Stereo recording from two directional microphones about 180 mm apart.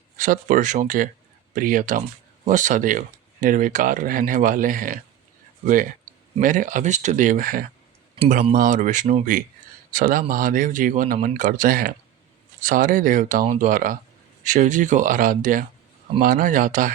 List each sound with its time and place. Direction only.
0.2 s speech: 45° right (ahead or behind)